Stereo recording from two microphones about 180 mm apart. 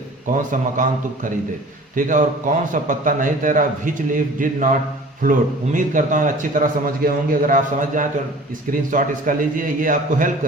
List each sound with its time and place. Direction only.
0.3 s a man's voice: 45° right (ahead or behind)